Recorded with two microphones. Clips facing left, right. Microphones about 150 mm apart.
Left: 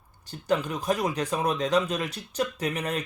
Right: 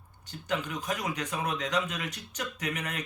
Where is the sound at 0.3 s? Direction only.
35° left (ahead or behind).